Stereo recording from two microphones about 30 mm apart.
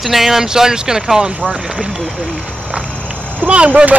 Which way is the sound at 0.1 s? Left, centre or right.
Centre.